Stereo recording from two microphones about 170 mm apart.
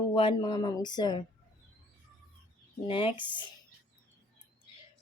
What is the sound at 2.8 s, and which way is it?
Speech, 30° left (ahead or behind).